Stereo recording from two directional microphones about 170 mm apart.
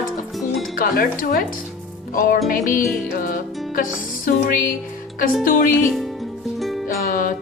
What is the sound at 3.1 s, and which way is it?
Music, 55° left (ahead or behind).